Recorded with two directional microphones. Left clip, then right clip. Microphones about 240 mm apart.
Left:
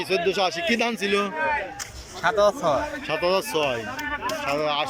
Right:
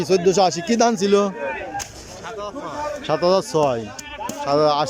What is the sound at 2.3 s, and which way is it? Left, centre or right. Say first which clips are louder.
Speech: left 12 dB; left.